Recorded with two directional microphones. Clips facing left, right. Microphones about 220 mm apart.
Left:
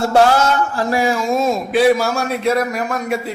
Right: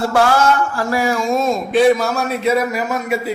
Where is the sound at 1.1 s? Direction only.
Centre (ahead or behind).